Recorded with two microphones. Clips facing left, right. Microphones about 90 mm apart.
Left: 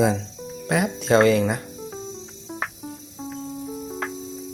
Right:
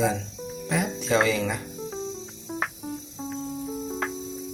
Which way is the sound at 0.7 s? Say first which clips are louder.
Left 5 dB; 70° left (ahead or behind).